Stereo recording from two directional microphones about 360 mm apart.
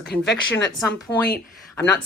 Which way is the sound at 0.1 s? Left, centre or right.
Left.